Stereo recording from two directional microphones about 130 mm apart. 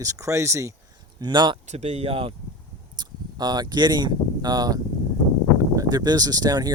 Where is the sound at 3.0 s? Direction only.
30° right (ahead or behind).